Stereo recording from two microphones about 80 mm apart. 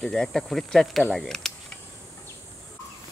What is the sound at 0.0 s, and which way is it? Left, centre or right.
Speech, centre.